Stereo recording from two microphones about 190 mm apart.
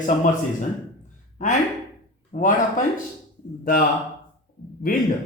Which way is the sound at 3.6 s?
50° left (ahead or behind).